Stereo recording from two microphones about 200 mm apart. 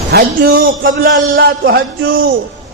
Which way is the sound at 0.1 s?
45° right (ahead or behind).